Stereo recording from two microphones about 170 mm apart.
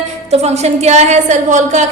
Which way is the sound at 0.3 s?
40° right (ahead or behind).